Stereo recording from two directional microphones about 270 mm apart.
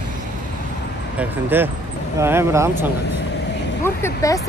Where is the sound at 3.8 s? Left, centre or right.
Centre.